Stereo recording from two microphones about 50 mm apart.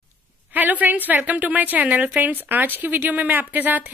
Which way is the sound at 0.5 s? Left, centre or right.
Right.